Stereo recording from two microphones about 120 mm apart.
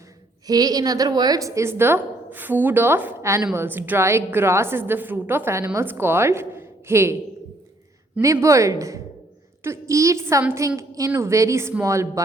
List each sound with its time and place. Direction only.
0.4 s a woman's voice: 35° right (ahead or behind)
8.2 s a woman's voice: 25° right (ahead or behind)